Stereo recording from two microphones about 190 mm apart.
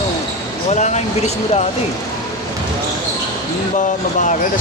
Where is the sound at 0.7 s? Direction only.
40° left (ahead or behind).